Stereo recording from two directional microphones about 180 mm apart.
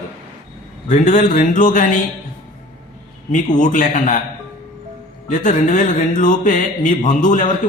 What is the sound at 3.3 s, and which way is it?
Speech, 45° left (ahead or behind).